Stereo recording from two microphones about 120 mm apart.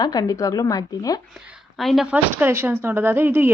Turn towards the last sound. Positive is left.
turn(degrees=-20)  # may be behind; listen again after turning